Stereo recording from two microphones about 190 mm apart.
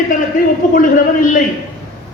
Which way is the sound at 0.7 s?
45° left (ahead or behind).